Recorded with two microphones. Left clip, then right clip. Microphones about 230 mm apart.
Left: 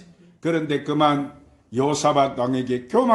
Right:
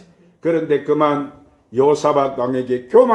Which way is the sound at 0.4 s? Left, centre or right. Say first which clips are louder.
Right 6 dB; left.